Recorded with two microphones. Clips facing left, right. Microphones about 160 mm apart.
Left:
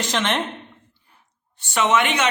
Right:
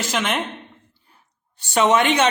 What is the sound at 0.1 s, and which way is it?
Speech, 5° right (ahead or behind).